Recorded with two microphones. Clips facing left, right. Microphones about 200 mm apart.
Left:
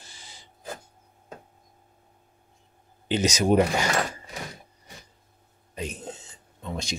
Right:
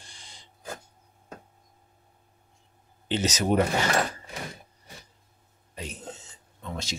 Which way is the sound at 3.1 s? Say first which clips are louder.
Left 3 dB; 15° left (ahead or behind).